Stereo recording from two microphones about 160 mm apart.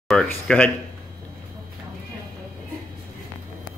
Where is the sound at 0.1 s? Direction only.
5° left (ahead or behind).